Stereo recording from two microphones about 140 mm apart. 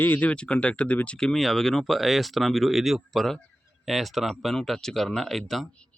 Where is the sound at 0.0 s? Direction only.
10° left (ahead or behind).